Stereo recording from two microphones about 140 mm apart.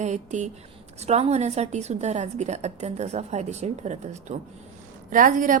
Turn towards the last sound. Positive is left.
turn(degrees=-75)  # may be behind; listen again after turning